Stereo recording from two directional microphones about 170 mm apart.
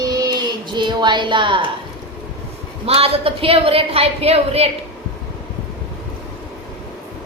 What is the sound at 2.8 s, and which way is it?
A woman's voice, 35° right (ahead or behind).